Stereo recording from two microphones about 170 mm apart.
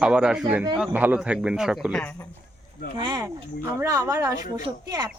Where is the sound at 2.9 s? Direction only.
25° right (ahead or behind).